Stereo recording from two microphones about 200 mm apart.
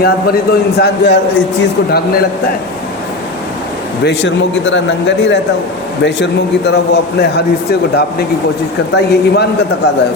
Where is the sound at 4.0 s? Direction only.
60° left (ahead or behind).